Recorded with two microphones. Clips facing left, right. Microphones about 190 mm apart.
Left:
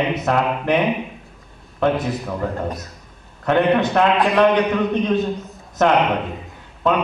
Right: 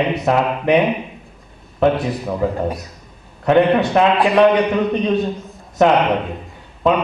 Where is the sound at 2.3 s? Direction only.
10° right (ahead or behind).